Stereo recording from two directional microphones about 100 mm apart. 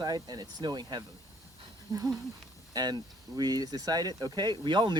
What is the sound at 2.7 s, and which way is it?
Speech, 45° right (ahead or behind).